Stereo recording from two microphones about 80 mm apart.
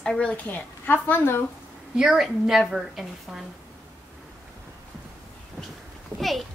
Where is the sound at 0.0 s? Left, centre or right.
Centre.